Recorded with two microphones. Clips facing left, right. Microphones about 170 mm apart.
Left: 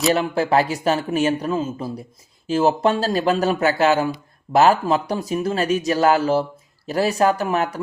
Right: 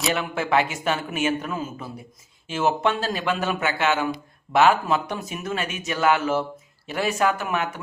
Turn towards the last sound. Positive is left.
turn(degrees=35)  # may be behind; listen again after turning